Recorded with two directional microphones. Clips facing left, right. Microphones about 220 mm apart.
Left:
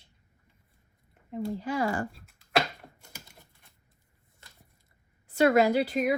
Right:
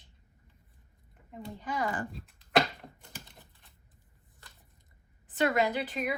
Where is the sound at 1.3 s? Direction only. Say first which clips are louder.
Left 7 dB; 35° left (ahead or behind).